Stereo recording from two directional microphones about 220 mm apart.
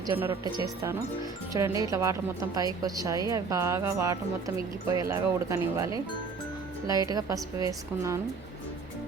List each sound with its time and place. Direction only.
0.0 s a woman's voice: 15° right (ahead or behind)